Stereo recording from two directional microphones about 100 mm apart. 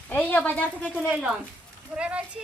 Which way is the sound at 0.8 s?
10° right (ahead or behind).